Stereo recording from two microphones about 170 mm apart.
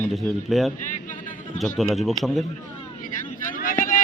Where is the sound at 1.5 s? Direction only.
50° left (ahead or behind).